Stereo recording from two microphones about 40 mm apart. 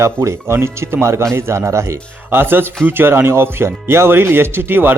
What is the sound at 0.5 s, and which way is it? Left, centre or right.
Speech, right.